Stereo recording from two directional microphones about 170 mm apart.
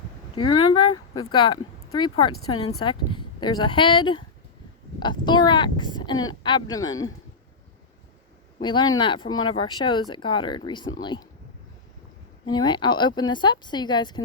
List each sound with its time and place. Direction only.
0.3 s speech: 25° left (ahead or behind)
8.6 s speech: 25° left (ahead or behind)
12.5 s speech: 25° left (ahead or behind)